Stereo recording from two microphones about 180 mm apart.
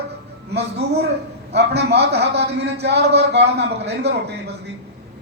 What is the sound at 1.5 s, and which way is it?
A man's voice, 65° right (ahead or behind).